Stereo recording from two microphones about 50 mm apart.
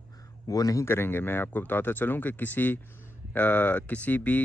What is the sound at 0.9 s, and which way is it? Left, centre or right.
Speech, left.